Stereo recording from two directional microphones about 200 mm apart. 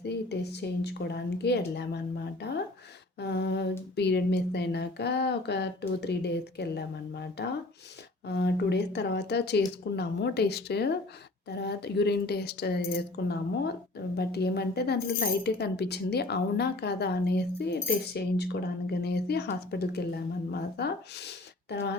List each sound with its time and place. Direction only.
0.0 s speech: 55° left (ahead or behind)